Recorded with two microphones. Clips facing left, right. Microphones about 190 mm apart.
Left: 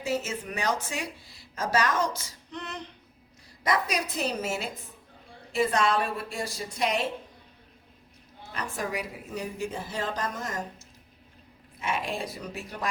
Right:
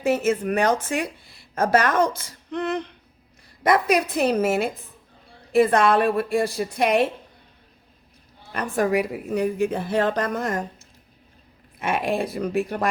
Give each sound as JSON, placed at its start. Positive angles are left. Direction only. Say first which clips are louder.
{"t": 0.0, "sound": "speech", "louder": "right 9 dB", "side_deg": -55}
{"t": 8.5, "sound": "speech", "louder": "right 11 dB", "side_deg": -55}